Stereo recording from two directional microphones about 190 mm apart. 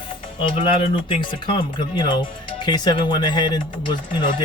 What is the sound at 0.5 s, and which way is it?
Speech, 30° left (ahead or behind).